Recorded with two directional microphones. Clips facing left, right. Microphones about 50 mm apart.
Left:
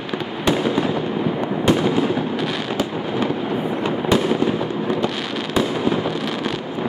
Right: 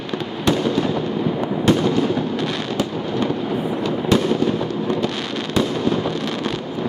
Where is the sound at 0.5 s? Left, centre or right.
Centre.